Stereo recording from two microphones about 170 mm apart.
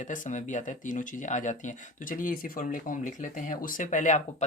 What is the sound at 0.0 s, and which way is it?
Speech, 45° left (ahead or behind).